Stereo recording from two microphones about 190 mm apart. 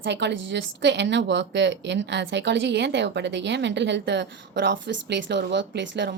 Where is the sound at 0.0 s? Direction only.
65° right (ahead or behind).